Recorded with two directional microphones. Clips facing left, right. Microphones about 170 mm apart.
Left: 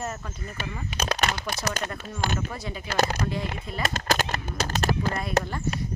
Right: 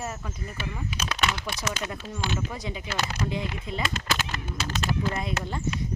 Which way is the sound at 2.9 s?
40° left (ahead or behind).